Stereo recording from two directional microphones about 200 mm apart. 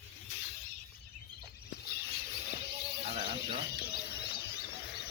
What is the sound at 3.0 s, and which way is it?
Music, 30° right (ahead or behind).